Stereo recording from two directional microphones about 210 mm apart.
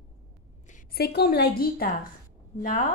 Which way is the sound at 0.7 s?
40° left (ahead or behind).